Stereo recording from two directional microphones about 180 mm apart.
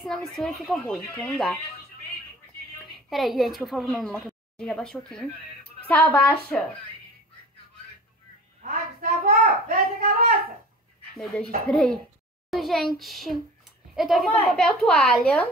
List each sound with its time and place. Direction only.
0.0 s a woman's voice: centre (ahead or behind)
2.8 s speech: centre (ahead or behind)
8.6 s a sound: 55° right (ahead or behind)
11.1 s a woman's voice: centre (ahead or behind)